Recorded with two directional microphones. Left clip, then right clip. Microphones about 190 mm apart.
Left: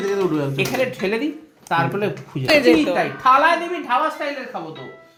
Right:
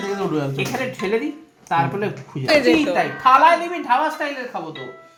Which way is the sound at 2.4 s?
15° left (ahead or behind).